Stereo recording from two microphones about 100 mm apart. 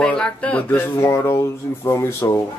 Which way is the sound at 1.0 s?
30° left (ahead or behind).